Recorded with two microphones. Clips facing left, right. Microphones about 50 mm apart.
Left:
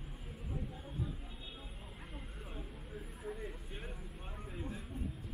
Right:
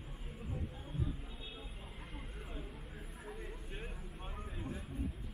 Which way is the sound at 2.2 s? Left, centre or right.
Centre.